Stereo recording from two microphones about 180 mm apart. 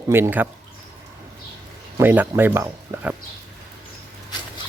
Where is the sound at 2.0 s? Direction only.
10° right (ahead or behind).